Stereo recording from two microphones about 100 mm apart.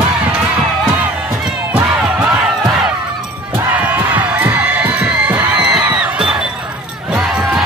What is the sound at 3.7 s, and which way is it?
Crowd, 15° right (ahead or behind).